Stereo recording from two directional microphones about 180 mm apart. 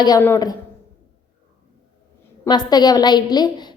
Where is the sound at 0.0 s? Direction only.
15° left (ahead or behind).